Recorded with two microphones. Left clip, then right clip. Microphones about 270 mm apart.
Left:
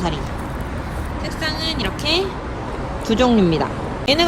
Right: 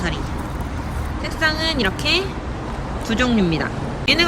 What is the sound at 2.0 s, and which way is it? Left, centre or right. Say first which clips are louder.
A woman's voice: even; centre.